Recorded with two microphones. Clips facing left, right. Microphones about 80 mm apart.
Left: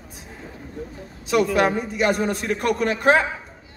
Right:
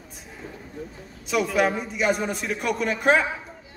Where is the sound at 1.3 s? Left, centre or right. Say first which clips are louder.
Left 3 dB; centre.